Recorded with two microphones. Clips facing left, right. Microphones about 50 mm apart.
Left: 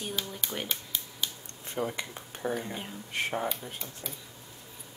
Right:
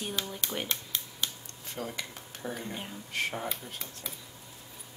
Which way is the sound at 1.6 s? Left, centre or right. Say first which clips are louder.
Left 5 dB; left.